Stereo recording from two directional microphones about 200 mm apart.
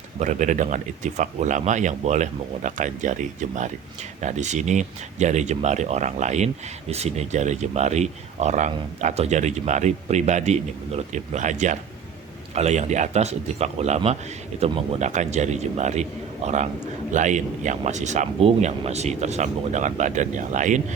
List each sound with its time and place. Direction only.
0.2 s speech: 40° right (ahead or behind)